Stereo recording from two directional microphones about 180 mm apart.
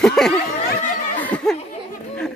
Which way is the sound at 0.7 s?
55° left (ahead or behind).